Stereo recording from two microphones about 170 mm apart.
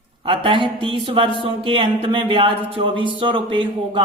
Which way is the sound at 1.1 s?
30° right (ahead or behind).